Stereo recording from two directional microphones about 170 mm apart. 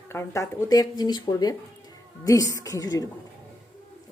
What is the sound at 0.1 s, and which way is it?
Speech, 15° left (ahead or behind).